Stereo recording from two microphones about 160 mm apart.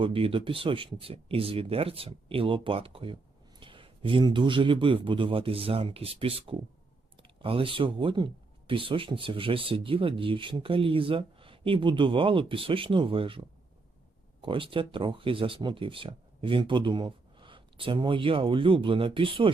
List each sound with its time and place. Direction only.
0.0 s speech: 35° right (ahead or behind)
7.2 s clicking: 35° right (ahead or behind)
7.9 s speech: 30° right (ahead or behind)
14.4 s speech: 30° right (ahead or behind)